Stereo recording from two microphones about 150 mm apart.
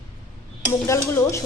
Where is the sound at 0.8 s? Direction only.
20° left (ahead or behind).